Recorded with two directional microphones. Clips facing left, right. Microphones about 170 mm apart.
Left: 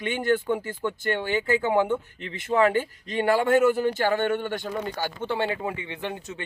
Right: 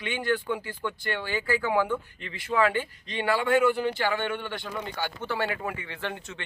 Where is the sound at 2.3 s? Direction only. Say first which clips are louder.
Left 4 dB; 50° left (ahead or behind).